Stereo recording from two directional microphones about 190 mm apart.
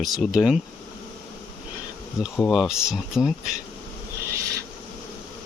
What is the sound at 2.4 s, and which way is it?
Speech, centre (ahead or behind).